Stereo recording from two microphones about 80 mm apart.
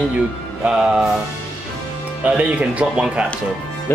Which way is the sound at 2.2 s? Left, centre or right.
Centre.